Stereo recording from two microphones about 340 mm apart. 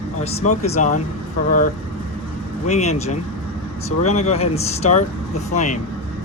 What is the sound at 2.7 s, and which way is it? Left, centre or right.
Speech, centre.